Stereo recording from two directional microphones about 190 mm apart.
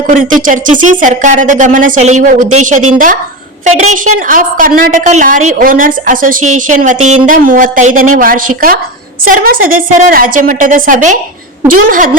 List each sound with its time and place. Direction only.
0.1 s a woman's voice: 45° right (ahead or behind)